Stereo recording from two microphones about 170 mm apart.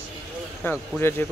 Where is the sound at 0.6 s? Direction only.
15° left (ahead or behind).